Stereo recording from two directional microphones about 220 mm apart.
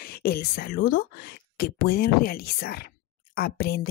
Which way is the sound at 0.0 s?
45° left (ahead or behind).